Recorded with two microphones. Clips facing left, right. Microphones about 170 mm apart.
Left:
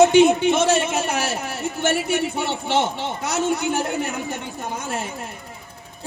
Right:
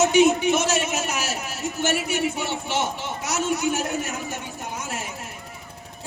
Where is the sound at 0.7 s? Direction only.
60° left (ahead or behind).